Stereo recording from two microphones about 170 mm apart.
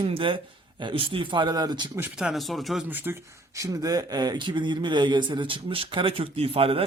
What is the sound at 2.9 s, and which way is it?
Speech, 10° right (ahead or behind).